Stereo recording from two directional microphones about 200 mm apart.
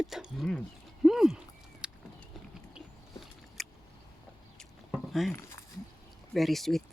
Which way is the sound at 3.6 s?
Centre (ahead or behind).